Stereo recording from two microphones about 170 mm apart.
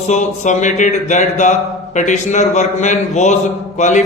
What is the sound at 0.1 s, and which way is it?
Speech, 45° left (ahead or behind).